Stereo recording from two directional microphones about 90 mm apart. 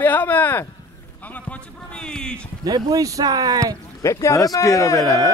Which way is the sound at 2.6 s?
45° right (ahead or behind).